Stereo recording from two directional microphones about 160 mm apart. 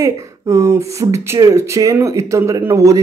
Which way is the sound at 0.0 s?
20° right (ahead or behind).